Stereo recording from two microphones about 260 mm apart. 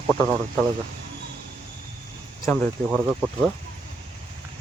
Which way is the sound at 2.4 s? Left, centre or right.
Centre.